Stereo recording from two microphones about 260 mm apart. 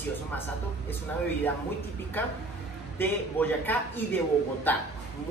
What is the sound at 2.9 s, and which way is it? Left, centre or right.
A man's voice, centre.